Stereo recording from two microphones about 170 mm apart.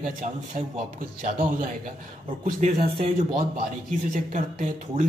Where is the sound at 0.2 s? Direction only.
50° right (ahead or behind).